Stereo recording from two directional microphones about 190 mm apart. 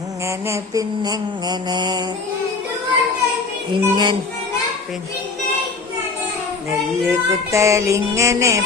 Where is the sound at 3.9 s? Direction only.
25° right (ahead or behind).